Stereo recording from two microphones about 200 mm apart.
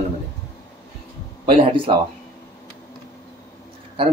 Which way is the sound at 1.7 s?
25° right (ahead or behind).